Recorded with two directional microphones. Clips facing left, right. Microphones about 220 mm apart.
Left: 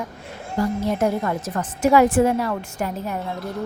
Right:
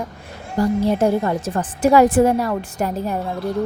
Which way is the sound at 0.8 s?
30° right (ahead or behind).